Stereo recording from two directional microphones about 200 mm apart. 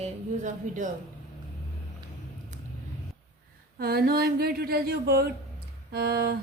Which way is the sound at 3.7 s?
50° right (ahead or behind).